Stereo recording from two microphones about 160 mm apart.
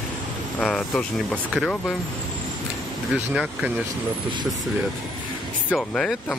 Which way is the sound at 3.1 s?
5° right (ahead or behind).